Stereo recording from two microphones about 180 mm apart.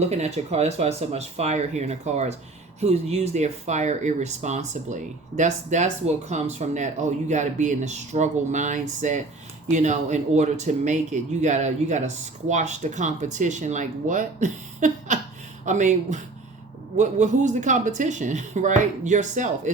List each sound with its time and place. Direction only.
0.1 s speech: 35° right (ahead or behind)